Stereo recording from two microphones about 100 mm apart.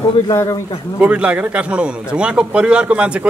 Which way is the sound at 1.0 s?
15° right (ahead or behind).